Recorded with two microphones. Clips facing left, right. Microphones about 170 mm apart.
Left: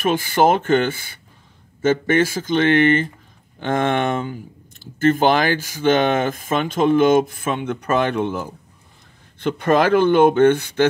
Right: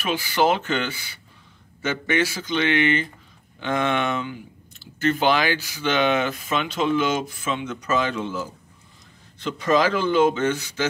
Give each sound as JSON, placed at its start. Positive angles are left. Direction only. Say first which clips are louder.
{"t": 0.0, "sound": "a man's voice", "louder": "left 5 dB", "side_deg": 50}